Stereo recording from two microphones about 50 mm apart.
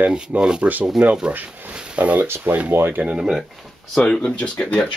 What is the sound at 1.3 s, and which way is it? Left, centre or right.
Speech, right.